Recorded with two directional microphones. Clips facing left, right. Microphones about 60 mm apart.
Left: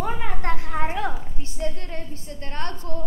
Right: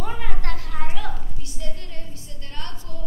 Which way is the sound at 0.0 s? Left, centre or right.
Centre.